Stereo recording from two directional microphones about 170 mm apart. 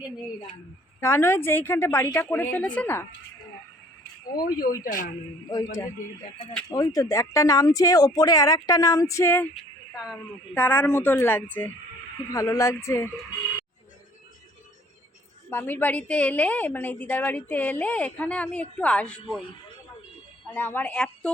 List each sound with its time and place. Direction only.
1.0 s a woman's voice: 15° left (ahead or behind)
4.4 s speech: 60° left (ahead or behind)
5.5 s speech: 25° left (ahead or behind)
6.7 s speech: 20° left (ahead or behind)
10.5 s a woman's voice: 10° left (ahead or behind)
15.4 s a woman's voice: 10° left (ahead or behind)
20.6 s a woman's voice: 10° left (ahead or behind)